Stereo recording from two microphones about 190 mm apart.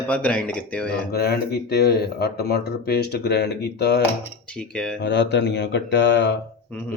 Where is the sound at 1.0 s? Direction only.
55° left (ahead or behind).